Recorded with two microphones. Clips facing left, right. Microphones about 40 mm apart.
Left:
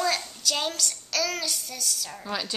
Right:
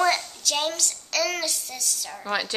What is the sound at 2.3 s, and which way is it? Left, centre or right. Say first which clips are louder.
Speech: right 5 dB; right.